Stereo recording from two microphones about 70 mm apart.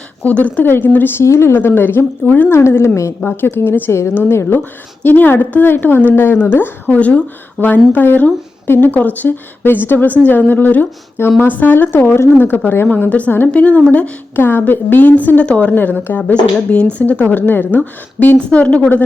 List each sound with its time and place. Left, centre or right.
0.2 s speech: left
1.2 s a woman's voice: left
2.5 s a woman's voice: left
5.0 s a woman's voice: left
14.3 s speech: left